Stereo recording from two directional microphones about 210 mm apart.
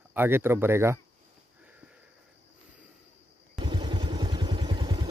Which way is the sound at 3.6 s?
20° right (ahead or behind).